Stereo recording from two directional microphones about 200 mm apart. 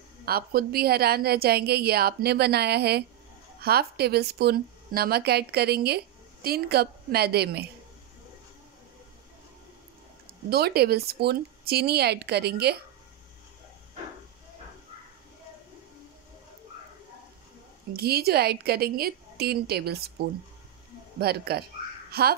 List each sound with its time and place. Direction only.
0.2 s a woman's voice: 50° right (ahead or behind)
10.5 s a woman's voice: 50° right (ahead or behind)
17.9 s a woman's voice: 50° right (ahead or behind)